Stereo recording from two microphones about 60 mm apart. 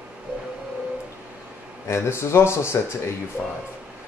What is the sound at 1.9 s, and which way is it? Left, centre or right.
Speech, left.